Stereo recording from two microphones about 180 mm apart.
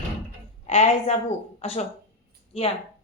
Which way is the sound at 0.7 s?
35° left (ahead or behind).